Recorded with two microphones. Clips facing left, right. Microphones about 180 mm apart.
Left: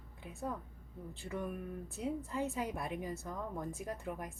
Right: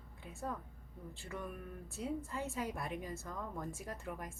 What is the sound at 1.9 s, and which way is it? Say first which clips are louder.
A woman's voice: left 2 dB; 20° left (ahead or behind).